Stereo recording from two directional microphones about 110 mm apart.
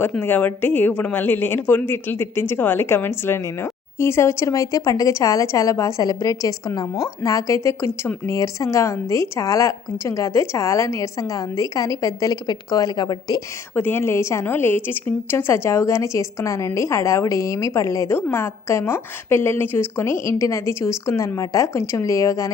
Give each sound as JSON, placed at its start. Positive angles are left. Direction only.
{"t": 0.2, "sound": "a woman's voice", "side_deg": 15}
{"t": 13.7, "sound": "a woman's voice", "side_deg": 20}